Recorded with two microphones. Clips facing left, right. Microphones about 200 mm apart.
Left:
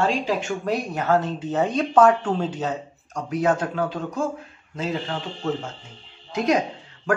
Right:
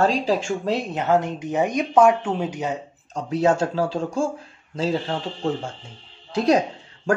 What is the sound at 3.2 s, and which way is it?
A man's voice, 30° right (ahead or behind).